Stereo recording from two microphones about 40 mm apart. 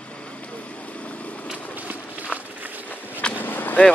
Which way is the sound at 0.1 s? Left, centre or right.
Left.